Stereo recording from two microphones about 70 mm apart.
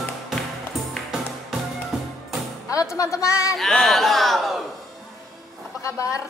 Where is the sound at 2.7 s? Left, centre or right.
Left.